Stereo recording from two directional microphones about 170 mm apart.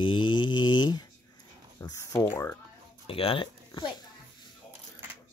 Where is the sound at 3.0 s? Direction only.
35° left (ahead or behind).